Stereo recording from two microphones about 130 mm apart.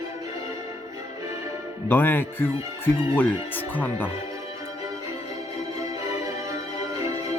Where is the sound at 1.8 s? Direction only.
15° left (ahead or behind).